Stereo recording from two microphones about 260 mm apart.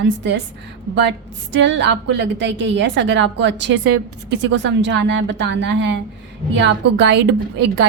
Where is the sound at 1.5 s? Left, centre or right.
Right.